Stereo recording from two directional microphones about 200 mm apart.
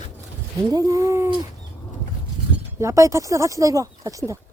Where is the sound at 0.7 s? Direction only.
15° right (ahead or behind).